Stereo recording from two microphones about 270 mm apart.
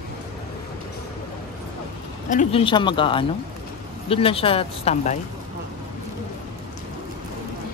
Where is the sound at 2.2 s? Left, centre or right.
Left.